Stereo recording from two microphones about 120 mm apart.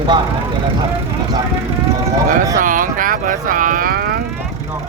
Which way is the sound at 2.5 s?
90° right.